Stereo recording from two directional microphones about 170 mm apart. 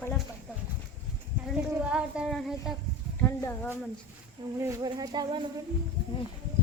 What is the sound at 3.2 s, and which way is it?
Speech, 10° left (ahead or behind).